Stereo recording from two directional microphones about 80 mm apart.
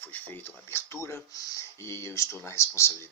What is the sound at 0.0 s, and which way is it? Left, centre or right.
Speech, left.